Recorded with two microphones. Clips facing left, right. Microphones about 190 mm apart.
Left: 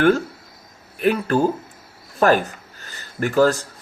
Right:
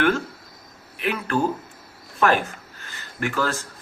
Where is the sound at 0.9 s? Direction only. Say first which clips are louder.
Left 6 dB; 40° left (ahead or behind).